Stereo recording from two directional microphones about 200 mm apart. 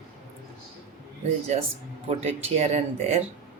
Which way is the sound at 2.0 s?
30° right (ahead or behind).